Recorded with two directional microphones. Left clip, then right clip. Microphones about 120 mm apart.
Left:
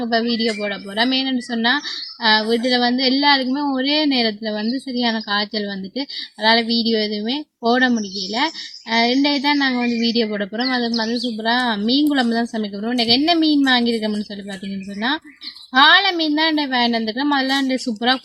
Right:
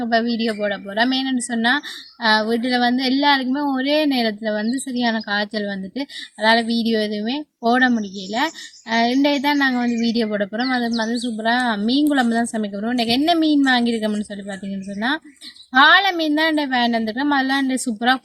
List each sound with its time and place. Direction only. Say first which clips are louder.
0.0 s a woman's voice: even; 20° right (ahead or behind)
15.7 s a woman's voice: even; 15° right (ahead or behind)